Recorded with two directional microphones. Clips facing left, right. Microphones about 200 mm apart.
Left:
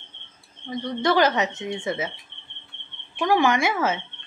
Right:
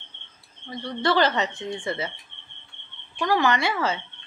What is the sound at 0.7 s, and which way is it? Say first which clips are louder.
A woman's voice: left 2 dB; 15° left (ahead or behind).